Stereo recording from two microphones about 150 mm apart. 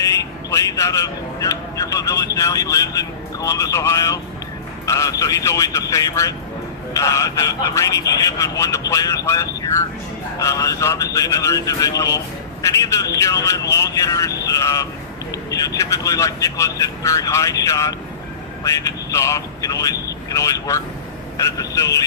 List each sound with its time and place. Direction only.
0.0 s speech: 20° left (ahead or behind)